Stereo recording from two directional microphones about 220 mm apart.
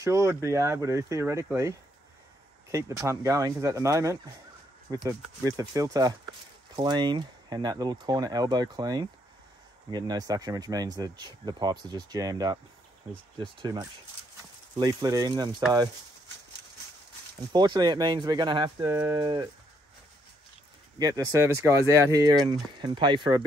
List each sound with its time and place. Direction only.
0.0 s speech: 15° right (ahead or behind)
14.8 s speech: 20° right (ahead or behind)
17.5 s speech: 20° right (ahead or behind)
21.0 s speech: 15° right (ahead or behind)